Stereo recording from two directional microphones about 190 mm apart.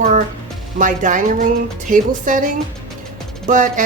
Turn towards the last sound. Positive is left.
turn(degrees=-40)  # may be behind; listen again after turning